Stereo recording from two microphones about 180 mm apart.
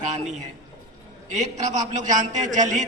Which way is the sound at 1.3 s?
40° right (ahead or behind).